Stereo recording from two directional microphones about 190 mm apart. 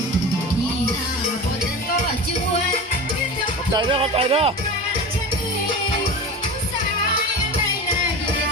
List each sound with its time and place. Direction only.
3.7 s music: 25° right (ahead or behind)